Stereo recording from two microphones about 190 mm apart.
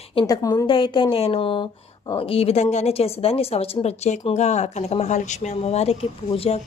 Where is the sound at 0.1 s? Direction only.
25° left (ahead or behind).